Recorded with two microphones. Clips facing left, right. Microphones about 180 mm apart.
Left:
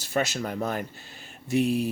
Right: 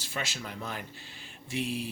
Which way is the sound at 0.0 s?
45° left (ahead or behind).